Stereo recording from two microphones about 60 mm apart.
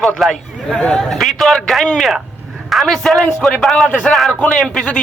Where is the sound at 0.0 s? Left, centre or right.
Centre.